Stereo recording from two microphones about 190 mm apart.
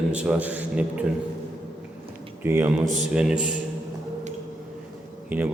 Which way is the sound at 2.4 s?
10° right (ahead or behind).